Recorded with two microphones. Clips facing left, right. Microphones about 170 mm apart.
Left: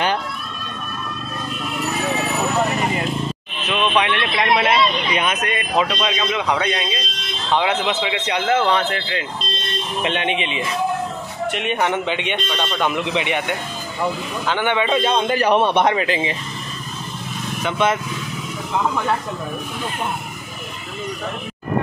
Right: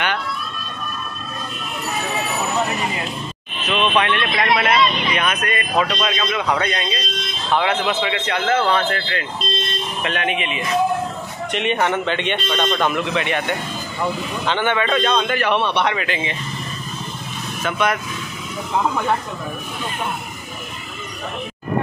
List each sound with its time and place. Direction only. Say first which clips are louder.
3.7 s speech: right 1 dB; 10° left (ahead or behind); by 10.7 s 30° left (ahead or behind)
11.5 s speech: right 2 dB; 5° left (ahead or behind)
15.0 s a man's voice: left 2 dB; 30° left (ahead or behind)
16.0 s a man's voice: left 3 dB; 35° left (ahead or behind)
17.6 s speech: left 1 dB; 25° left (ahead or behind)